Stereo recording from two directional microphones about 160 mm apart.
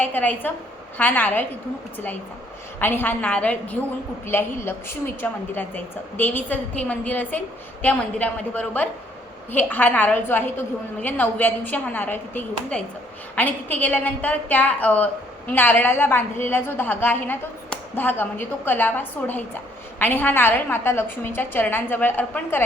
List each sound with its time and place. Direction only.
0.0 s a woman's voice: 10° left (ahead or behind)
2.7 s a woman's voice: 15° left (ahead or behind)